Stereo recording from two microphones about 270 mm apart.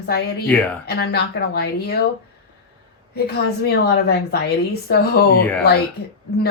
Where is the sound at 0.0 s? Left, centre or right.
Left.